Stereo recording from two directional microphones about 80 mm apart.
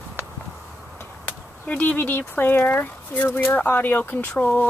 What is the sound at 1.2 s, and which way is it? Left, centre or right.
Speech, left.